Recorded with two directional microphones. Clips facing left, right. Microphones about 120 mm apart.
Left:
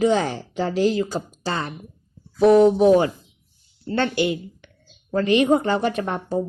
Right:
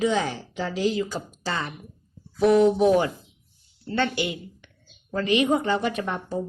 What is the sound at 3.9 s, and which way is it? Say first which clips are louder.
A woman's voice: left 4 dB; 40° left (ahead or behind).